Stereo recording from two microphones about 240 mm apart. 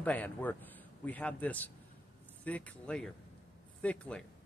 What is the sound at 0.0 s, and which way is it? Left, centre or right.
A man's voice, centre.